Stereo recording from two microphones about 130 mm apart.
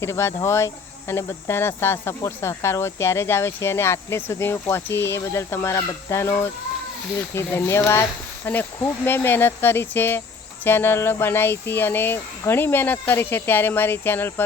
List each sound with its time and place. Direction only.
0.0 s speech: 20° left (ahead or behind)